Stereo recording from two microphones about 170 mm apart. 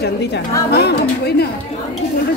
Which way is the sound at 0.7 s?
70° left (ahead or behind).